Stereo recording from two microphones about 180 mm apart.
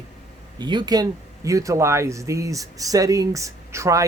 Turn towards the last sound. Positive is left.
turn(degrees=-15)  # may be behind; listen again after turning